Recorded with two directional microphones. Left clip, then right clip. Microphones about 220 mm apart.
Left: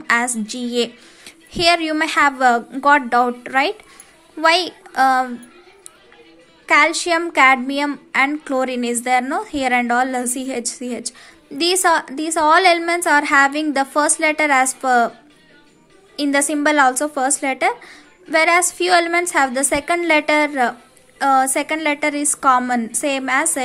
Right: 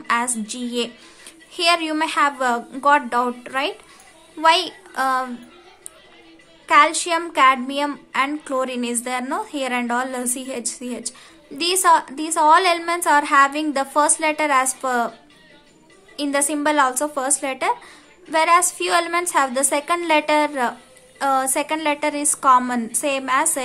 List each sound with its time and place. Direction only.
0.0 s a woman's voice: 20° left (ahead or behind)
6.6 s a child's voice: 15° left (ahead or behind)
16.2 s a child's voice: 15° left (ahead or behind)